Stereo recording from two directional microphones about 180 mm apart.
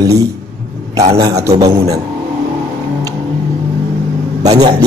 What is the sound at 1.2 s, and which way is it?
Speech, 20° right (ahead or behind).